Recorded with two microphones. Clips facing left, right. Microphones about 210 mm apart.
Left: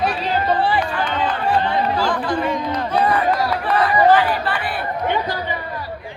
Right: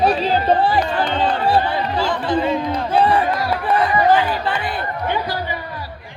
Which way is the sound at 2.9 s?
30° right (ahead or behind).